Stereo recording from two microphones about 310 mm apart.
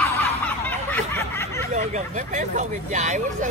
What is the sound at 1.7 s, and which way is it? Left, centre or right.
Speech, right.